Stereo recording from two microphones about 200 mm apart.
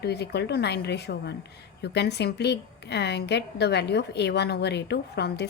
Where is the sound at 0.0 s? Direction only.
55° left (ahead or behind).